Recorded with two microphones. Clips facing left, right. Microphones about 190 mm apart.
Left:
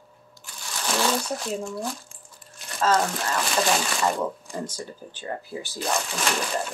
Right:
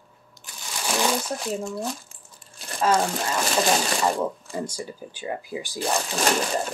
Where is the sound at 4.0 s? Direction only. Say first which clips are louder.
Right 1 dB; 10° right (ahead or behind).